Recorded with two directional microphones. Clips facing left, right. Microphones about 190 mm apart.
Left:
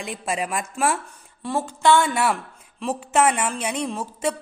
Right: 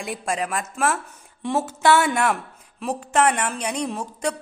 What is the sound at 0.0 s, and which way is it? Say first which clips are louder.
Speech: right 1 dB; centre (ahead or behind).